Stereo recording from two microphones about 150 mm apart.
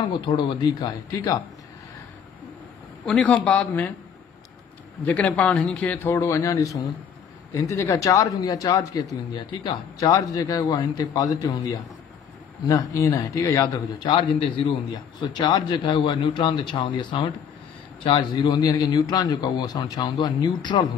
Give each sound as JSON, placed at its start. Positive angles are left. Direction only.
{"t": 0.1, "sound": "a man's voice", "side_deg": 30}
{"t": 3.1, "sound": "a man's voice", "side_deg": 10}
{"t": 5.0, "sound": "a man's voice", "side_deg": 10}
{"t": 14.0, "sound": "a man's voice", "side_deg": 35}